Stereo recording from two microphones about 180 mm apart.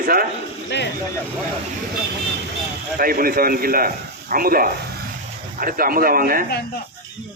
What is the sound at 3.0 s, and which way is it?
A man's voice, 55° right (ahead or behind).